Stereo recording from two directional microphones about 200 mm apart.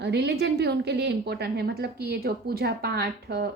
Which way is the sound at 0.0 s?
55° right (ahead or behind).